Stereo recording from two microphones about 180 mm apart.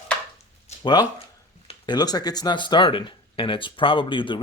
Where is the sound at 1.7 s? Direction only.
25° left (ahead or behind).